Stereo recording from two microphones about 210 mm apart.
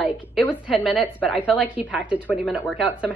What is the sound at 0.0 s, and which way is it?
A woman's voice, 5° left (ahead or behind).